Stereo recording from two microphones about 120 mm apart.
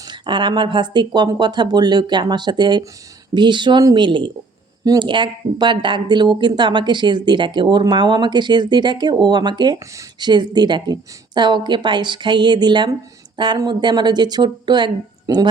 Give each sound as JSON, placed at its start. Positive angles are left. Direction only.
{"t": 0.0, "sound": "speech", "side_deg": -40}